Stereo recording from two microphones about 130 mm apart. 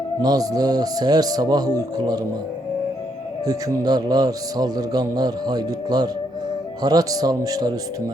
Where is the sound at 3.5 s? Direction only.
30° right (ahead or behind).